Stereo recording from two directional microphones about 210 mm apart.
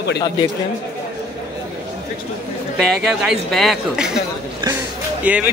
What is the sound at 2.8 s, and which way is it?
Speech, 5° right (ahead or behind).